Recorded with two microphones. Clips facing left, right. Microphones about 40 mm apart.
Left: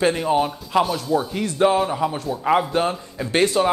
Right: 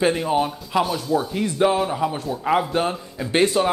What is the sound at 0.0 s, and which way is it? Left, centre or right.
Speech, centre.